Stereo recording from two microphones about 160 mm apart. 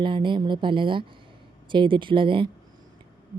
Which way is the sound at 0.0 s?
30° right (ahead or behind).